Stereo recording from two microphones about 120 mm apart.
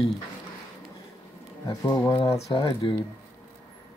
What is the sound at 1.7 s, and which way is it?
Speech, 30° left (ahead or behind).